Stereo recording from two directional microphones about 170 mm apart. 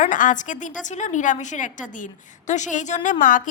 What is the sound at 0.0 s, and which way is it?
A woman's voice, 50° left (ahead or behind).